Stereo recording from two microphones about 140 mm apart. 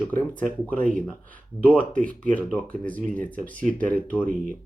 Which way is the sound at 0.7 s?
65° right (ahead or behind).